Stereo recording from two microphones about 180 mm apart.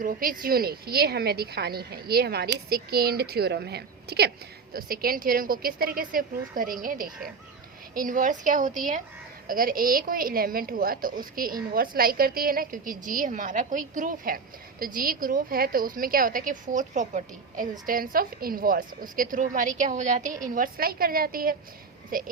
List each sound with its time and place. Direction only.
0.0 s a woman's voice: 50° right (ahead or behind)
4.7 s a woman's voice: 55° right (ahead or behind)